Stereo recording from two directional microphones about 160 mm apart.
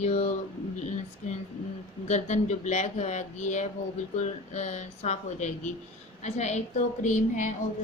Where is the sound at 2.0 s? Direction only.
45° left (ahead or behind).